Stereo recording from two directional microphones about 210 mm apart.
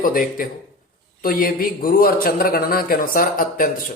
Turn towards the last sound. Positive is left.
turn(degrees=40)  # may be behind; listen again after turning